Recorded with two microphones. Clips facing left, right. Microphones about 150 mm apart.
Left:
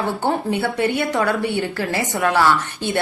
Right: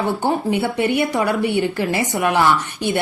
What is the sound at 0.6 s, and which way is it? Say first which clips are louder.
A woman's voice: right 1 dB; 20° right (ahead or behind).